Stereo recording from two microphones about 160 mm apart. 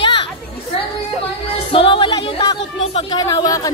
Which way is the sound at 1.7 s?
30° left (ahead or behind).